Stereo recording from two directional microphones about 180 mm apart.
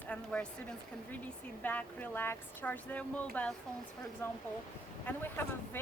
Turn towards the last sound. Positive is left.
turn(degrees=10)  # may be behind; listen again after turning